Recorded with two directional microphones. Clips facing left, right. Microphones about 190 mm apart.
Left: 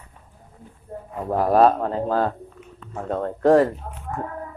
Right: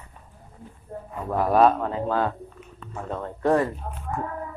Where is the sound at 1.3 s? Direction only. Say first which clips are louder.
Left 2 dB; 40° left (ahead or behind).